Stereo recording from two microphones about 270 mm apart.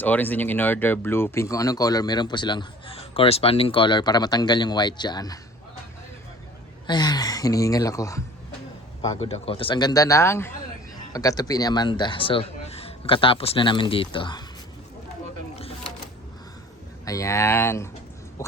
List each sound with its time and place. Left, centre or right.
0.0 s speech: centre
6.8 s speech: centre
15.5 s a sound: left
17.1 s speech: centre